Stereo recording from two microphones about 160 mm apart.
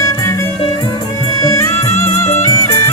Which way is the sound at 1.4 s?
20° left (ahead or behind).